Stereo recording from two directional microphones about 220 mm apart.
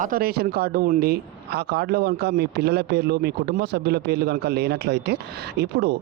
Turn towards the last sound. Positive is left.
turn(degrees=-50)  # may be behind; listen again after turning